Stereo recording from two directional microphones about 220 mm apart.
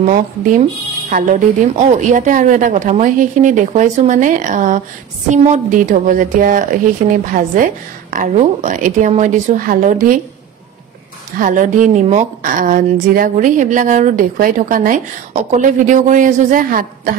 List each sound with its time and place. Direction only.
0.0 s a woman's voice: 35° right (ahead or behind)
11.3 s a woman's voice: 35° right (ahead or behind)